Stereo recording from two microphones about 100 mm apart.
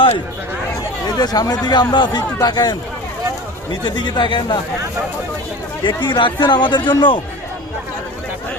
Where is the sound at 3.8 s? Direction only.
50° left (ahead or behind).